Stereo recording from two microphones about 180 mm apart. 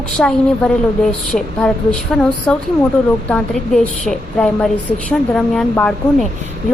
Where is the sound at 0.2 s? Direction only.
5° left (ahead or behind).